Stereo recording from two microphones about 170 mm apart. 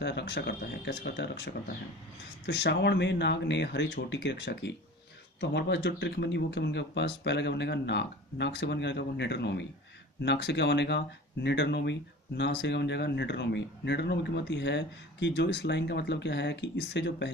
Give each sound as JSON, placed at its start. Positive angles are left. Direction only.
{"t": 0.0, "sound": "speech", "side_deg": 85}